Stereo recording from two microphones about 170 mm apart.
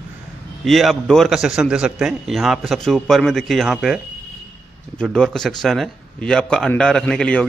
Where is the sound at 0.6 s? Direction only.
Centre (ahead or behind).